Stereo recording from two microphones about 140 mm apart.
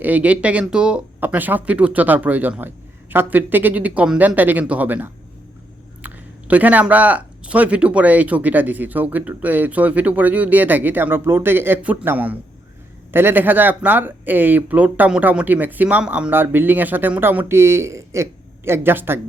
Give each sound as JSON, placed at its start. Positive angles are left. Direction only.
{"t": 0.0, "sound": "speech", "side_deg": -10}